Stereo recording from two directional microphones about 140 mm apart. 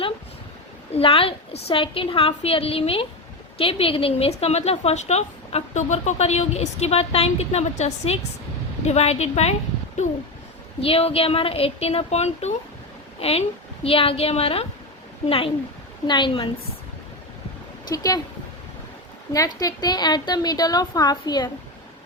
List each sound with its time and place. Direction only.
0.9 s a woman's voice: 40° left (ahead or behind)
10.8 s a woman's voice: 45° left (ahead or behind)
16.0 s a woman's voice: 35° left (ahead or behind)
17.8 s a woman's voice: 25° left (ahead or behind)
19.3 s a woman's voice: 25° left (ahead or behind)